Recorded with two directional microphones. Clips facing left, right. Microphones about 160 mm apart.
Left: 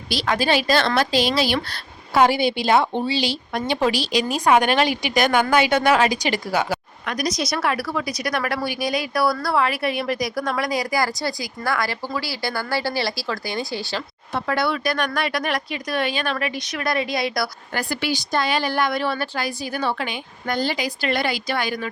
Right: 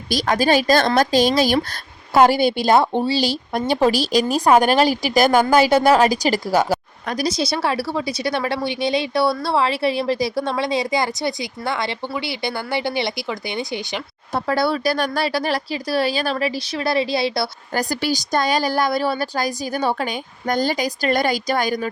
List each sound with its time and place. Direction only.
0.1 s a woman's voice: 45° right (ahead or behind); by 14.0 s 20° right (ahead or behind)
14.3 s speech: 35° right (ahead or behind)